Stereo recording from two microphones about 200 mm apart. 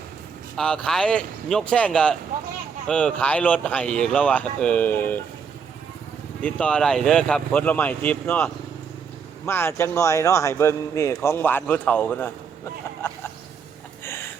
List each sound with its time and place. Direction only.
0.5 s speech: 5° left (ahead or behind)
6.4 s speech: 5° left (ahead or behind)
9.5 s speech: 10° left (ahead or behind)